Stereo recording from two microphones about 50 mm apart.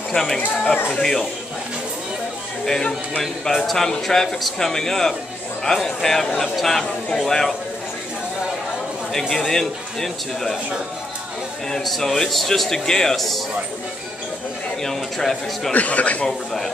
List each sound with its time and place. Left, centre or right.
0.1 s speech: centre
2.6 s a man's voice: centre
9.3 s speech: centre
11.8 s a man's voice: centre
14.8 s speech: centre
15.7 s speech: left
16.3 s a man's voice: centre